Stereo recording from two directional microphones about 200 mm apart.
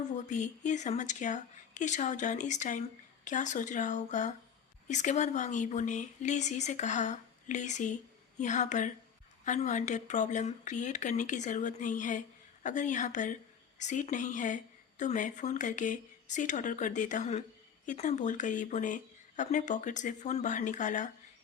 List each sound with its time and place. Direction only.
0.3 s a woman's voice: 40° left (ahead or behind)